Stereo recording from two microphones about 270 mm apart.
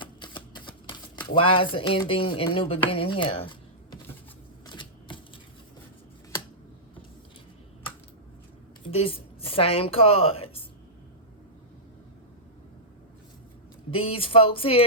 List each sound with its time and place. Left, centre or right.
0.0 s typewriter: centre
1.3 s speech: centre
4.6 s typewriter: centre
8.8 s a woman's voice: centre
13.9 s speech: left